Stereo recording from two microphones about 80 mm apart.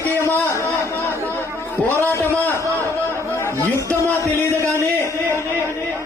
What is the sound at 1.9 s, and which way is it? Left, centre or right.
Speech, left.